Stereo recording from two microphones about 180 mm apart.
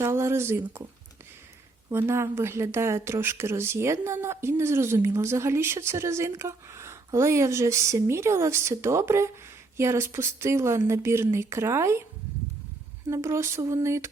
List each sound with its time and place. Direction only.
0.0 s speech: 15° right (ahead or behind)
1.9 s speech: 15° right (ahead or behind)
13.1 s speech: 15° right (ahead or behind)